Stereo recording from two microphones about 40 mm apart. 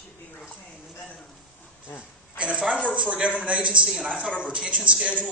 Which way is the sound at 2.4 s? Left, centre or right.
Right.